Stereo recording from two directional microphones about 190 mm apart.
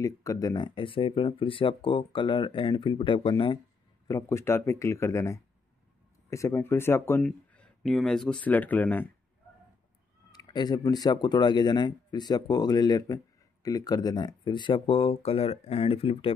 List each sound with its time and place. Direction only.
0.0 s speech: 15° left (ahead or behind)
4.1 s speech: 15° left (ahead or behind)
10.3 s speech: 20° left (ahead or behind)